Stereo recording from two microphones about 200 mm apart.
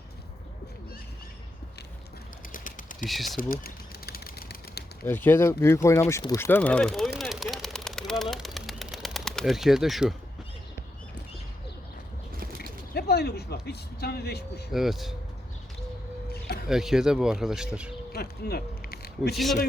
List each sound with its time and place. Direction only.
2.5 s typing: 40° left (ahead or behind)
3.1 s speech: centre (ahead or behind)
3.3 s typewriter: 50° left (ahead or behind)
5.0 s speech: 10° left (ahead or behind)
12.5 s speech: 50° left (ahead or behind)
14.7 s speech: centre (ahead or behind)
16.3 s a sound: 50° left (ahead or behind)
16.6 s speech: centre (ahead or behind)
18.1 s speech: 50° left (ahead or behind)